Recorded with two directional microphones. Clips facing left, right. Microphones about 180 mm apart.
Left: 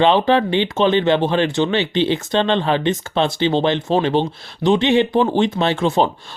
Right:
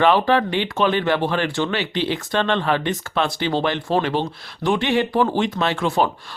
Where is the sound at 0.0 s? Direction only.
20° left (ahead or behind).